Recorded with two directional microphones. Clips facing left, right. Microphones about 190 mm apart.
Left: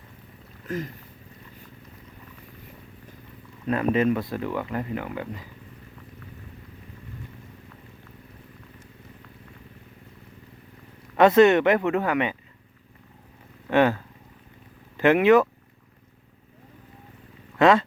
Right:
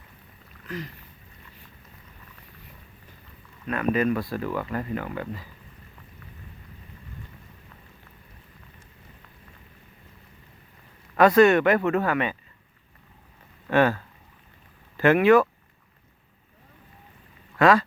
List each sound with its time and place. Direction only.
0.7 s speech: 45° left (ahead or behind)
3.7 s speech: 25° left (ahead or behind)
11.2 s speech: 20° left (ahead or behind)
13.7 s speech: 15° left (ahead or behind)
17.6 s speech: 25° left (ahead or behind)